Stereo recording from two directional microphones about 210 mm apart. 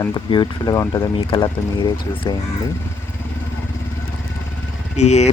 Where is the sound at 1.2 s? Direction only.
25° left (ahead or behind).